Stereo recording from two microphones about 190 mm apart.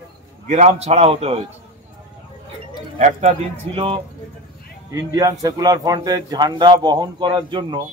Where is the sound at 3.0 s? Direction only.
40° right (ahead or behind).